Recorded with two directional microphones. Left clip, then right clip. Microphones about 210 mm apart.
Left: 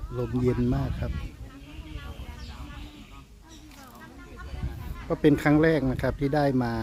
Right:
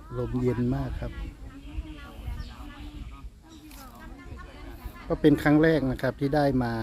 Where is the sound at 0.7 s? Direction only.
Centre (ahead or behind).